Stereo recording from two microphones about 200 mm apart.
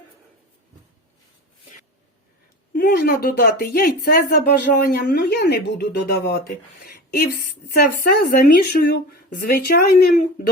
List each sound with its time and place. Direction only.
2.7 s speech: 50° left (ahead or behind)
6.8 s a sound: 50° left (ahead or behind)
7.7 s speech: 45° left (ahead or behind)